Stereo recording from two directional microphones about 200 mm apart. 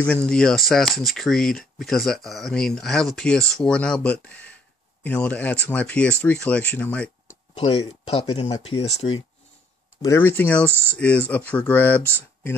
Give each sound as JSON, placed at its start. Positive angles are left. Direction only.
{"t": 0.0, "sound": "speech", "side_deg": 5}
{"t": 7.5, "sound": "speech", "side_deg": 30}
{"t": 10.0, "sound": "speech", "side_deg": 10}
{"t": 10.7, "sound": "speech", "side_deg": -10}
{"t": 11.0, "sound": "speech", "side_deg": 5}